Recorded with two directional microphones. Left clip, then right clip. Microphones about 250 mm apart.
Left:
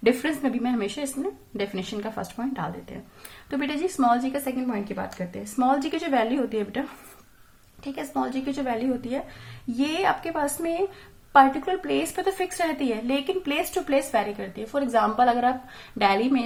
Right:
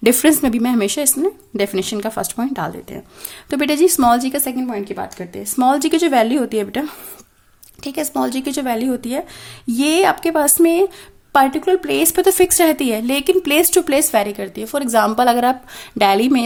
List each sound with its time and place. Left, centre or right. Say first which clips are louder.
0.0 s speech: right 9 dB; right
7.9 s speech: right 8 dB; right